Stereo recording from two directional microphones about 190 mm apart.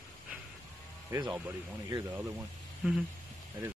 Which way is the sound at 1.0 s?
15° right (ahead or behind).